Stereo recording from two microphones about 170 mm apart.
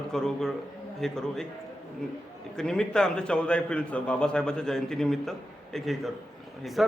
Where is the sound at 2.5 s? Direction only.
5° left (ahead or behind).